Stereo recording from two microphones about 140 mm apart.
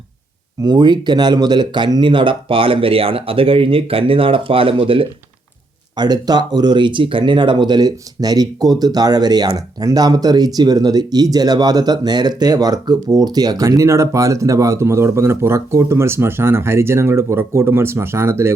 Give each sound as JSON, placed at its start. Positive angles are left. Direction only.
{"t": 0.6, "sound": "speech", "side_deg": -30}
{"t": 6.0, "sound": "speech", "side_deg": -30}